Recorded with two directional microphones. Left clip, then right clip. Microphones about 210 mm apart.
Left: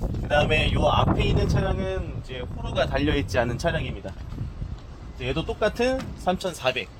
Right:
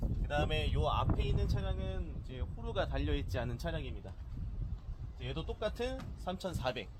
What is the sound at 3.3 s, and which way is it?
Speech, 45° left (ahead or behind).